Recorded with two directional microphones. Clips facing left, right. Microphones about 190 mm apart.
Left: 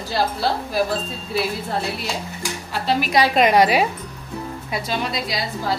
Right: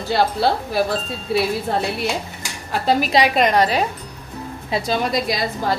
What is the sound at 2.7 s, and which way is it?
Speech, 45° right (ahead or behind).